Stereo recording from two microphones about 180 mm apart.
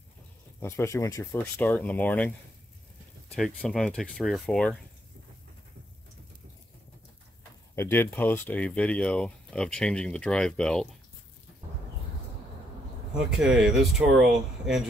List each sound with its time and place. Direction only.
0.6 s speech: 15° left (ahead or behind)
3.3 s speech: centre (ahead or behind)
7.7 s speech: 10° left (ahead or behind)
13.3 s speech: centre (ahead or behind)